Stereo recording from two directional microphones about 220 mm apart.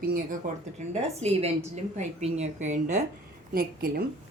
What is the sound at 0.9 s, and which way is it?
A woman's voice, 30° right (ahead or behind).